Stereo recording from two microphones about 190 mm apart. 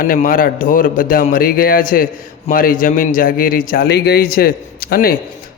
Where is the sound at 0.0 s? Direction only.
45° left (ahead or behind).